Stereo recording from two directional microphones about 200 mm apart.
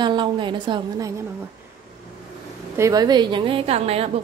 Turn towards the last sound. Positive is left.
turn(degrees=-30)  # may be behind; listen again after turning